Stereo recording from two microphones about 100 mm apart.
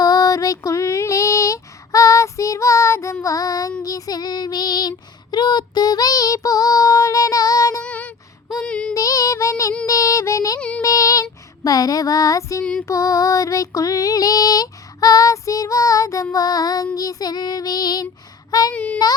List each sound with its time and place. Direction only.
0.0 s female singing: 35° left (ahead or behind)
7.8 s child singing: 15° left (ahead or behind)
8.6 s female singing: 10° left (ahead or behind)
8.9 s child singing: 35° left (ahead or behind)
12.8 s female singing: 30° left (ahead or behind)
18.7 s speech: 15° left (ahead or behind)